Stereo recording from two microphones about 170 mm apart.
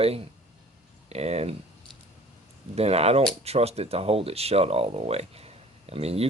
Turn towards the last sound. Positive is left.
turn(degrees=-35)  # may be behind; listen again after turning